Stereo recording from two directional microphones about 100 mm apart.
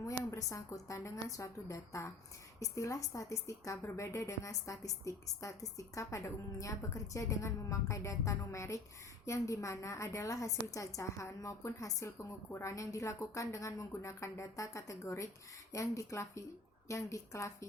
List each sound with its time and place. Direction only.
0.0 s a woman's voice: 35° left (ahead or behind)